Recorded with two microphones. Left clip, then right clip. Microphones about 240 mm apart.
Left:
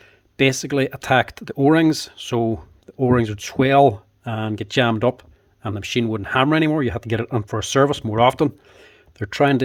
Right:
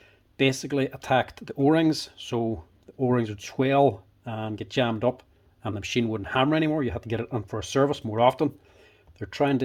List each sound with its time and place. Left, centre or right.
0.0 s speech: left
5.6 s speech: left